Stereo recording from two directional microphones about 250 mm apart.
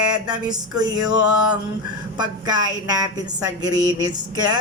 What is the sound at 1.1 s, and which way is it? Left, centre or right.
Mantra, left.